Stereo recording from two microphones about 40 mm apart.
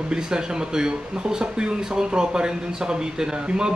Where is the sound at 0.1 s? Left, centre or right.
Centre.